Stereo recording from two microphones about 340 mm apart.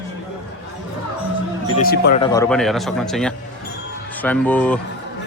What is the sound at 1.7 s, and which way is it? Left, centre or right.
Speech, left.